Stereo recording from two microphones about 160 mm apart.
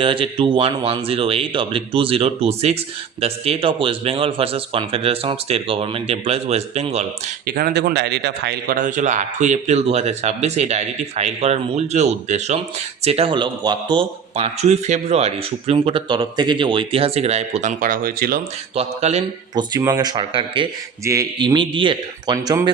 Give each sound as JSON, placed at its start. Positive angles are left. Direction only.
{"t": 0.0, "sound": "speech", "side_deg": -35}
{"t": 7.4, "sound": "a man's voice", "side_deg": -70}
{"t": 18.7, "sound": "speech", "side_deg": -40}
{"t": 19.5, "sound": "speech", "side_deg": -25}
{"t": 21.0, "sound": "speech", "side_deg": -20}